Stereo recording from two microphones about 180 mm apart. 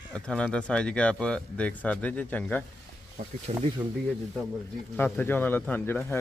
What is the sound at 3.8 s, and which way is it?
Speech, 10° right (ahead or behind).